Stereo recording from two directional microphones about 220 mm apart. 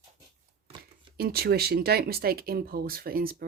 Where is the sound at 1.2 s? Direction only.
45° right (ahead or behind).